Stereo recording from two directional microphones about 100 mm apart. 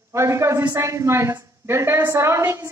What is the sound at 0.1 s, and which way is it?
A woman's voice, 30° right (ahead or behind).